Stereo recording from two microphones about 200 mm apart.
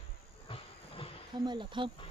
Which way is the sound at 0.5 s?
25° left (ahead or behind).